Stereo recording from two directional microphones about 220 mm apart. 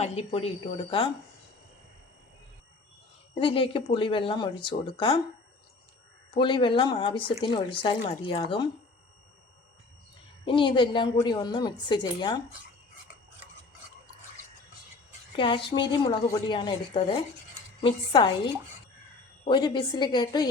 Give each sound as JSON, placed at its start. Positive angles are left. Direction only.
{"t": 0.0, "sound": "speech", "side_deg": 30}
{"t": 3.3, "sound": "speech", "side_deg": 25}
{"t": 6.3, "sound": "speech", "side_deg": 20}
{"t": 10.4, "sound": "speech", "side_deg": 20}
{"t": 15.4, "sound": "speech", "side_deg": 20}
{"t": 19.5, "sound": "speech", "side_deg": 20}